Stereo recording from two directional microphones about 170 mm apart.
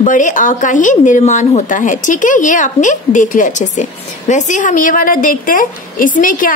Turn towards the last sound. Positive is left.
turn(degrees=50)  # may be behind; listen again after turning